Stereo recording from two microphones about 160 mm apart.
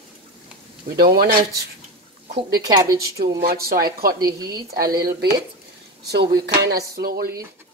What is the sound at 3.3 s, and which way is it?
Speech, 75° right (ahead or behind).